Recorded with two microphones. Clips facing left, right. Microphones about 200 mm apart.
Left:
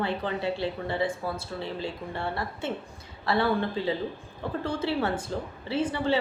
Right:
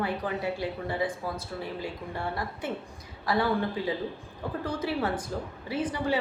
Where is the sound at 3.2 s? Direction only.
10° right (ahead or behind).